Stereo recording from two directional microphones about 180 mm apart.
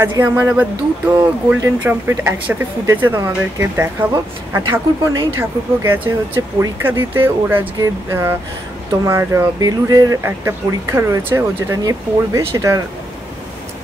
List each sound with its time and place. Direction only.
0.2 s speech: 10° right (ahead or behind)